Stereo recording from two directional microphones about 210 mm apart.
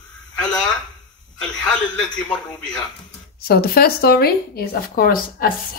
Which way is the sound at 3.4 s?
45° left (ahead or behind).